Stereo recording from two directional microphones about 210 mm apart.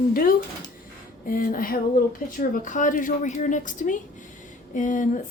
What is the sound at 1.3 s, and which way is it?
A woman's voice, 40° left (ahead or behind).